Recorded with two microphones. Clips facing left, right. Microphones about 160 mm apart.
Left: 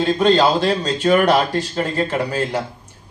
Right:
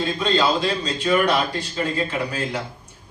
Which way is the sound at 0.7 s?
40° left (ahead or behind).